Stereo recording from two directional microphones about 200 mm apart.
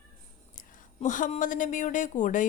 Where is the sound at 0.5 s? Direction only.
40° left (ahead or behind).